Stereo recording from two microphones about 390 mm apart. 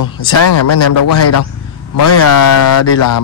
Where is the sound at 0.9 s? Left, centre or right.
Left.